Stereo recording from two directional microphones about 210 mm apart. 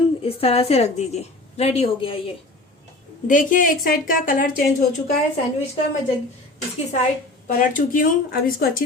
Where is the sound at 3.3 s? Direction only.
40° left (ahead or behind).